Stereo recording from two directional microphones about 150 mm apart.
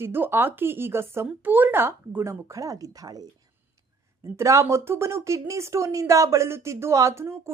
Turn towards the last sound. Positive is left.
turn(degrees=-15)  # may be behind; listen again after turning